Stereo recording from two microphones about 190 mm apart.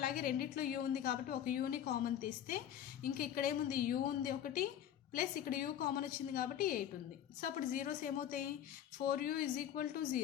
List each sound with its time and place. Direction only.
0.0 s a woman's voice: 50° left (ahead or behind)